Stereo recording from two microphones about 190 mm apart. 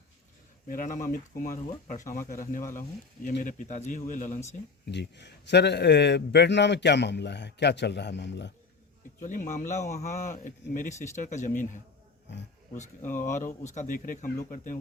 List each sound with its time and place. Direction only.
0.7 s speech: 45° left (ahead or behind)
4.9 s a man's voice: 65° left (ahead or behind)
9.2 s speech: 40° left (ahead or behind)
13.3 s speech: 40° left (ahead or behind)